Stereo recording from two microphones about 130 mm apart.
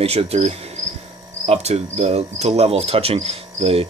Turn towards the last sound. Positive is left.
turn(degrees=-50)  # may be behind; listen again after turning